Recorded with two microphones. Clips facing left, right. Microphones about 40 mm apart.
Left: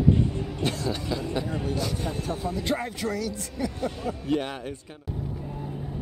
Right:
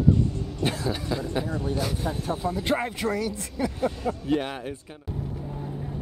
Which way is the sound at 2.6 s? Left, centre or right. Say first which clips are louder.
Right 2 dB; right.